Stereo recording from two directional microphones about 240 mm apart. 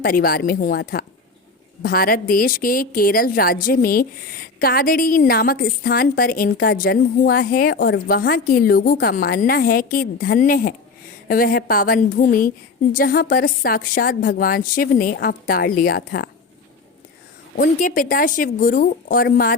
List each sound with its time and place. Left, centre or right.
0.0 s a woman's voice: left
17.6 s a woman's voice: left